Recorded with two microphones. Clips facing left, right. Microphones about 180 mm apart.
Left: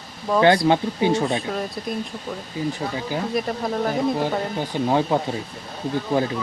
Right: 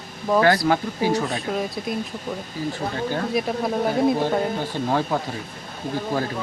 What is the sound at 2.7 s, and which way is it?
Speech, 10° left (ahead or behind).